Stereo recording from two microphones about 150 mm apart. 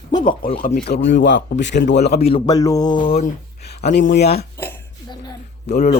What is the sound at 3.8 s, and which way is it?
Speech, 90° left.